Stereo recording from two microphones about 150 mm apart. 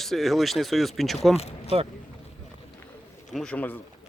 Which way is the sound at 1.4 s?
45° left (ahead or behind).